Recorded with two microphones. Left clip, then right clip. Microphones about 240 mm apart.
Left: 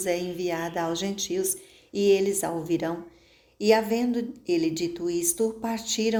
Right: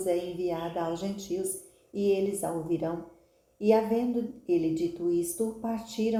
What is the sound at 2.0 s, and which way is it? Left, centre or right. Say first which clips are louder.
A woman's voice: left 5 dB; left.